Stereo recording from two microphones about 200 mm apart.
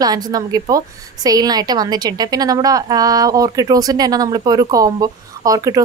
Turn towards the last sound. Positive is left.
turn(degrees=-15)  # may be behind; listen again after turning